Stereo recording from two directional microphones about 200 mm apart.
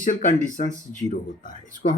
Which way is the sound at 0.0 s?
40° left (ahead or behind).